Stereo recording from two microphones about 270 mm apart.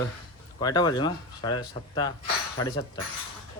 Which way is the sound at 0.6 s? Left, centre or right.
Centre.